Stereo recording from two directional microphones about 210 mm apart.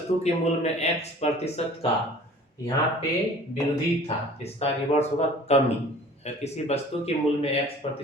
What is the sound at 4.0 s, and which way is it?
Speech, 30° left (ahead or behind).